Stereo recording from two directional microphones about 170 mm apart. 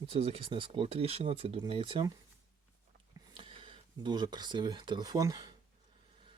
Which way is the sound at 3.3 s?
30° right (ahead or behind).